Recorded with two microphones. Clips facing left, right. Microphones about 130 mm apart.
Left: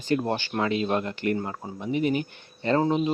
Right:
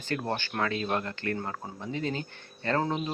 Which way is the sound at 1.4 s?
5° left (ahead or behind).